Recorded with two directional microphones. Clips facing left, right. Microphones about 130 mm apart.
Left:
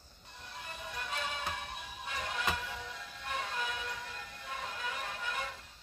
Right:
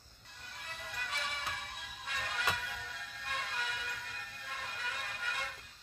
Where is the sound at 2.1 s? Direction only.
20° left (ahead or behind).